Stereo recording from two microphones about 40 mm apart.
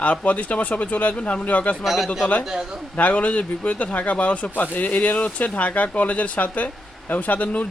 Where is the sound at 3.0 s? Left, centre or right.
Left.